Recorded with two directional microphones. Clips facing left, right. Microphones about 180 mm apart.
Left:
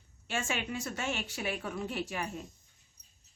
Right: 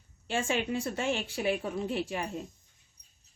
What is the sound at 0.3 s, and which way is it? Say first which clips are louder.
Speech: right 5 dB; 30° right (ahead or behind).